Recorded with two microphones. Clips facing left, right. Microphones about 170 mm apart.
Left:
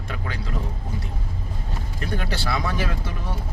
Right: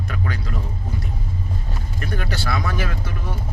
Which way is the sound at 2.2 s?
30° left (ahead or behind).